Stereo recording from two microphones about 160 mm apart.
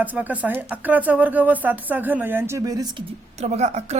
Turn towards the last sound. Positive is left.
turn(degrees=-45)  # may be behind; listen again after turning